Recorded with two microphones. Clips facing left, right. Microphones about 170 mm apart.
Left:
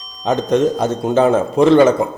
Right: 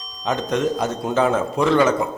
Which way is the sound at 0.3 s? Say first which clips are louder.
Left 6 dB; 30° left (ahead or behind).